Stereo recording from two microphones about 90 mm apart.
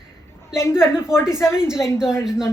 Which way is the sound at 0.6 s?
30° left (ahead or behind).